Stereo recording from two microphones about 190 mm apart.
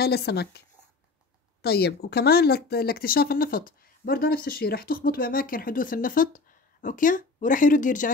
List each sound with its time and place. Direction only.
0.0 s speech: 55° left (ahead or behind)
1.6 s speech: 60° left (ahead or behind)